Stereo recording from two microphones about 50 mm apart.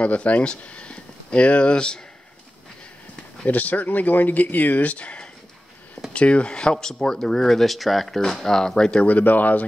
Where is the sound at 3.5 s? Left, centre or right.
Left; by 9.0 s centre.